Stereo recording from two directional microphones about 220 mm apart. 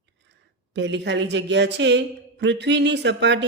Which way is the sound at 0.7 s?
55° right (ahead or behind).